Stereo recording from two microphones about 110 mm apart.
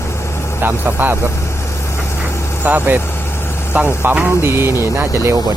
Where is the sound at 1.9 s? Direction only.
25° left (ahead or behind).